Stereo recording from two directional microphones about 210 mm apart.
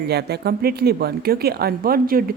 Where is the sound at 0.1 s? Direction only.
50° right (ahead or behind).